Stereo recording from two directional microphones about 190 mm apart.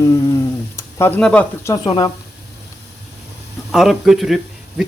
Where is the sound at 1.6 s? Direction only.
20° left (ahead or behind).